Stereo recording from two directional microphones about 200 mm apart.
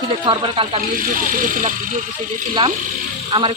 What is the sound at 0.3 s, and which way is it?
Speech, 25° right (ahead or behind).